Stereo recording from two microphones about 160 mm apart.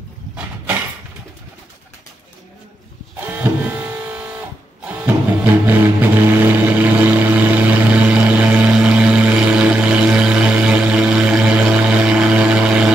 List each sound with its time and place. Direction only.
3.2 s printer: 10° right (ahead or behind)
4.8 s music: 10° right (ahead or behind)